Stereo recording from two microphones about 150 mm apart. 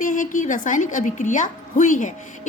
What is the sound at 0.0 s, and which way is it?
A woman's voice, 60° left (ahead or behind).